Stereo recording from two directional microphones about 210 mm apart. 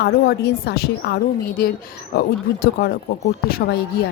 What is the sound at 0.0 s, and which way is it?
A woman's voice, 50° left (ahead or behind).